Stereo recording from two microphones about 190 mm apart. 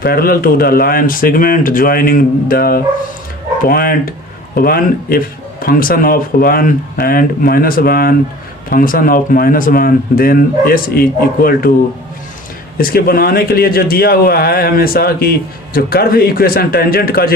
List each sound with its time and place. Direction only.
0.0 s a man's voice: 50° left (ahead or behind)
12.7 s a man's voice: 55° left (ahead or behind)